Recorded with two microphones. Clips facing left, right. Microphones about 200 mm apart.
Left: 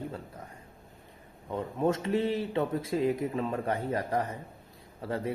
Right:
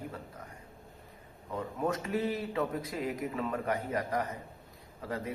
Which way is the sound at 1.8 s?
25° left (ahead or behind).